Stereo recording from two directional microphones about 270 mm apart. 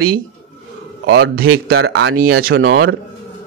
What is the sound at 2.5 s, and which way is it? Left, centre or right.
Speech, right.